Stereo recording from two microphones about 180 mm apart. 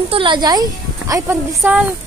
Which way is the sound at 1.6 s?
5° right (ahead or behind).